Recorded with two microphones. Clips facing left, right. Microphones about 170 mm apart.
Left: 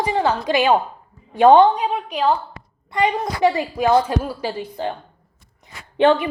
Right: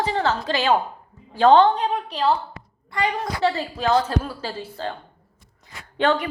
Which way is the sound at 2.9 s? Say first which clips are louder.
Left 4 dB; 20° left (ahead or behind).